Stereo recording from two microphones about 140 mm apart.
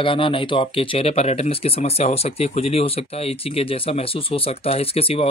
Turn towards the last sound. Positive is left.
turn(degrees=45)  # may be behind; listen again after turning